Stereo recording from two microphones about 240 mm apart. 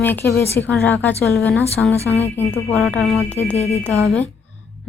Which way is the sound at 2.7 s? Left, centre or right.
Centre.